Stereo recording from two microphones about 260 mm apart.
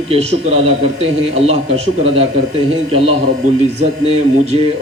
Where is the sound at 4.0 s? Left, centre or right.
Right.